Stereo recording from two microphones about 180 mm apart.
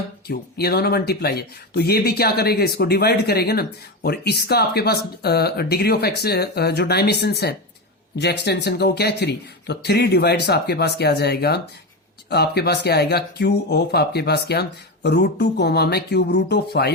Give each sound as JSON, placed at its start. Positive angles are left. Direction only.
{"t": 0.3, "sound": "speech", "side_deg": 60}